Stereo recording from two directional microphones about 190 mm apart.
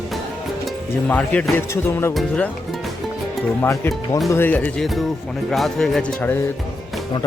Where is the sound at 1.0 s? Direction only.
5° left (ahead or behind).